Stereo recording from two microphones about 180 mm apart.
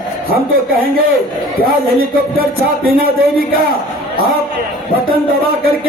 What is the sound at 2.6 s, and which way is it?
Speech, 55° right (ahead or behind).